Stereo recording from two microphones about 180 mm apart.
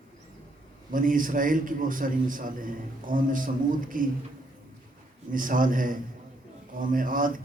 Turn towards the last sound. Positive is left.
turn(degrees=-50)  # may be behind; listen again after turning